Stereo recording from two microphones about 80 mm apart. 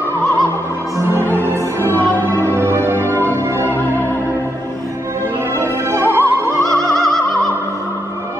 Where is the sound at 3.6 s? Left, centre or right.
Left.